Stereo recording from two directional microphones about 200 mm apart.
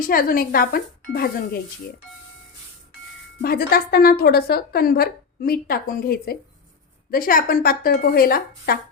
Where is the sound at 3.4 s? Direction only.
50° left (ahead or behind).